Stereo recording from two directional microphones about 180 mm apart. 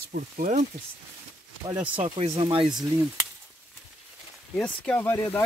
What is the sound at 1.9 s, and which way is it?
Speech, 30° right (ahead or behind).